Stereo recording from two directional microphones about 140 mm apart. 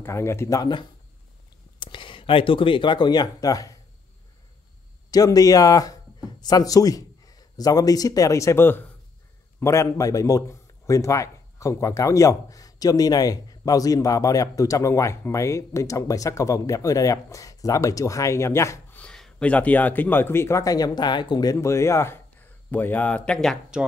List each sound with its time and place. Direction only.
0.0 s a man's voice: 20° left (ahead or behind)
5.1 s a man's voice: 25° left (ahead or behind)
18.9 s speech: 5° left (ahead or behind)